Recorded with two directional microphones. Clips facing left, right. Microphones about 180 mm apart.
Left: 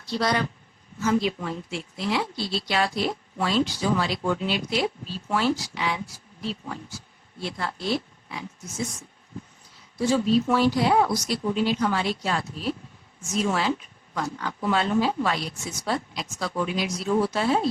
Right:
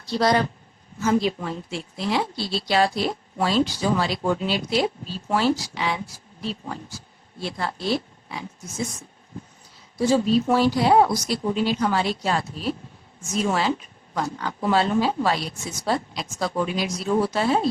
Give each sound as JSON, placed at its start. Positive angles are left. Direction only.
{"t": 0.0, "sound": "a woman's voice", "side_deg": -35}
{"t": 10.0, "sound": "a woman's voice", "side_deg": -35}